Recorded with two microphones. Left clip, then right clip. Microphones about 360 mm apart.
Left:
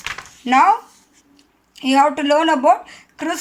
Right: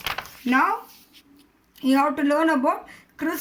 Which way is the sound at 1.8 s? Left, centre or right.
Centre.